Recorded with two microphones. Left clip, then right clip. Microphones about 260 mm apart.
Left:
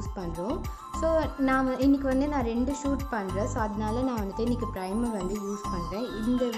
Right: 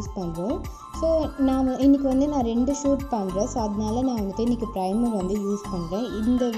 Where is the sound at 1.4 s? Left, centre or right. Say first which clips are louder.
Right 2 dB; left.